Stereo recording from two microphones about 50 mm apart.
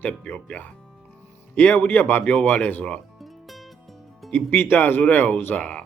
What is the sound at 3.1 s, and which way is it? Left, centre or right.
Music, centre.